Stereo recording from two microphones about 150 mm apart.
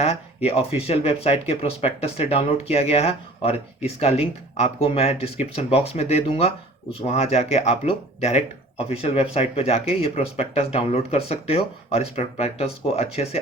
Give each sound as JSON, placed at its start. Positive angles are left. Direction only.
{"t": 0.4, "sound": "speech", "side_deg": 40}